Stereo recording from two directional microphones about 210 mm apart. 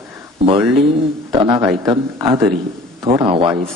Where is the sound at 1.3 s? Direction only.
20° right (ahead or behind).